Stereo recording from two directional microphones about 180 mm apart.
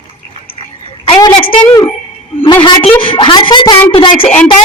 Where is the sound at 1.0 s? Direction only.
25° left (ahead or behind).